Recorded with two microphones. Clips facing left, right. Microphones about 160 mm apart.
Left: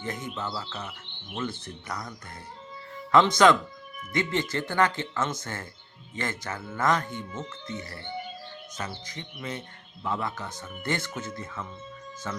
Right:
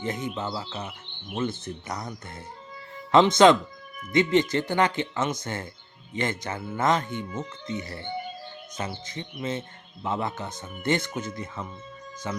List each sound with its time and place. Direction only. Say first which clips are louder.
0.0 s speech: right 4 dB; 20° right (ahead or behind)